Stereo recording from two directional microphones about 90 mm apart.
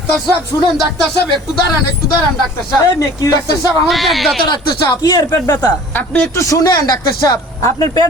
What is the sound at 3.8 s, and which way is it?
Speech, centre (ahead or behind).